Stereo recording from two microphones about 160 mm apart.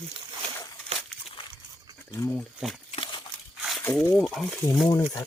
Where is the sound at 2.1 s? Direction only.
15° left (ahead or behind).